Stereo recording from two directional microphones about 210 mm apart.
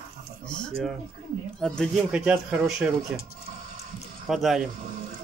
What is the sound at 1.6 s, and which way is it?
Speech, centre (ahead or behind).